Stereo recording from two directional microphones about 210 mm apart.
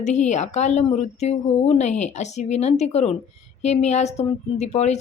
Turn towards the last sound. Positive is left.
turn(degrees=30)  # may be behind; listen again after turning